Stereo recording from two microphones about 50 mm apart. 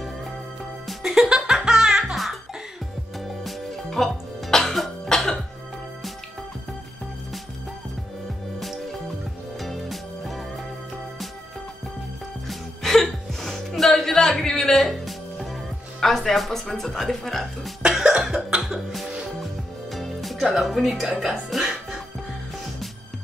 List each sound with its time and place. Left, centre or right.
1.0 s music: centre
3.4 s music: centre
9.6 s music: centre
12.4 s music: centre
16.0 s speech: centre
17.8 s music: centre
20.4 s speech: centre
21.2 s music: centre